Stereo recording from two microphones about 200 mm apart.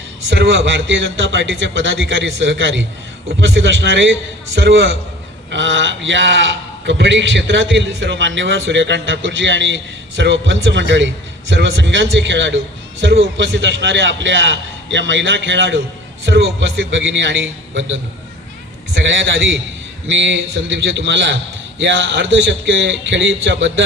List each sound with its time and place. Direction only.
0.3 s a man's voice: 65° right (ahead or behind)
20.1 s a man's voice: 65° right (ahead or behind)